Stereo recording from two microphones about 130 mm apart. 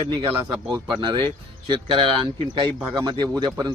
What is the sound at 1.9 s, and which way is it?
A man's voice, 40° right (ahead or behind).